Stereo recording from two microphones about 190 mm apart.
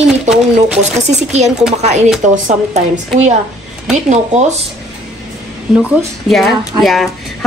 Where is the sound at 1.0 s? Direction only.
35° right (ahead or behind).